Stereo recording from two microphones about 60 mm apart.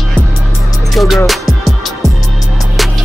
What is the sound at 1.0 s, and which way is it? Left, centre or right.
Music, centre.